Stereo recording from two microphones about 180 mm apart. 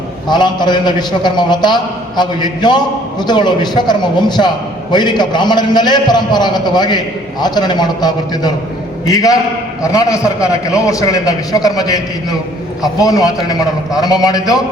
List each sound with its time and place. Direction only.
0.3 s a man's voice: 25° left (ahead or behind)